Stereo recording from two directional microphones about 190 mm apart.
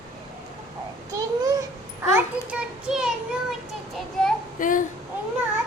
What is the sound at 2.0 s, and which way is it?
A child's voice, 10° right (ahead or behind).